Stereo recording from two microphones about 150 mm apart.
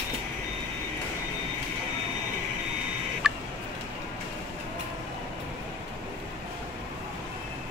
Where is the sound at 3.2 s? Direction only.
5° right (ahead or behind).